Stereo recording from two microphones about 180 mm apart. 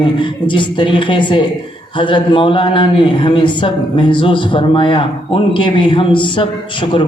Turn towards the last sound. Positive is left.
turn(degrees=25)  # may be behind; listen again after turning